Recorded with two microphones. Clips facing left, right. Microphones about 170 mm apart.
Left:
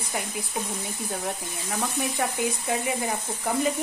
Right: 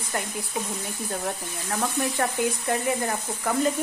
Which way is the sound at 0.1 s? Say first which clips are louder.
Right 1 dB; 10° left (ahead or behind).